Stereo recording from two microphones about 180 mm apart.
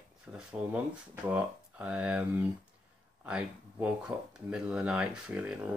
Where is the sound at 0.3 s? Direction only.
10° right (ahead or behind).